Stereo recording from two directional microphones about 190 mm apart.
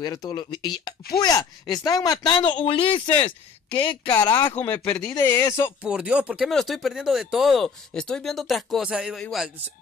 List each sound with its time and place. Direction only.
0.0 s speech: 20° left (ahead or behind)
4.1 s speech: 10° left (ahead or behind)
5.9 s speech: 5° right (ahead or behind)